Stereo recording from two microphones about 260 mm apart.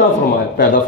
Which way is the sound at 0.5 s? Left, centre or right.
Left.